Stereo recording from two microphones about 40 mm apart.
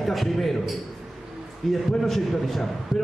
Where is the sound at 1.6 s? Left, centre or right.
Centre.